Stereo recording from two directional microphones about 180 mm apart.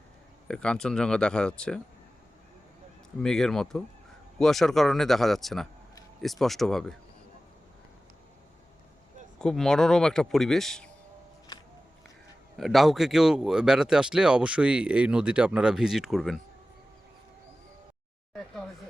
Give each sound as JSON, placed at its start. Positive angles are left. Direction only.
{"t": 0.4, "sound": "speech", "side_deg": 5}
{"t": 3.2, "sound": "speech", "side_deg": 5}
{"t": 9.4, "sound": "speech", "side_deg": 5}
{"t": 11.5, "sound": "a sound", "side_deg": 25}
{"t": 12.5, "sound": "speech", "side_deg": 0}